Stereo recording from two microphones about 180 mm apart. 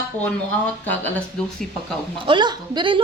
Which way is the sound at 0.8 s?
10° left (ahead or behind).